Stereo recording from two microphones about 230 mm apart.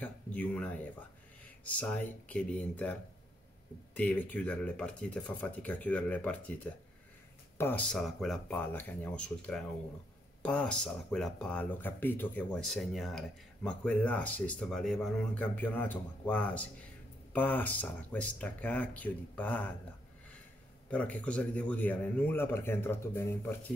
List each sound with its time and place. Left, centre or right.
0.0 s a man's voice: centre
20.9 s a man's voice: centre